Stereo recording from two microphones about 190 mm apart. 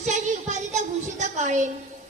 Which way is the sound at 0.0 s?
40° right (ahead or behind).